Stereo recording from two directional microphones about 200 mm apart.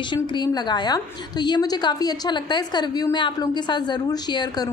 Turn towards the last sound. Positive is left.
turn(degrees=20)  # may be behind; listen again after turning